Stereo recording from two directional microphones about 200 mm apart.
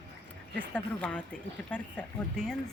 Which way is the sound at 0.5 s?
5° left (ahead or behind).